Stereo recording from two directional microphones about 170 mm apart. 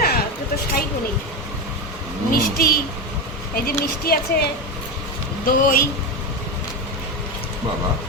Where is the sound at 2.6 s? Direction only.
60° left (ahead or behind).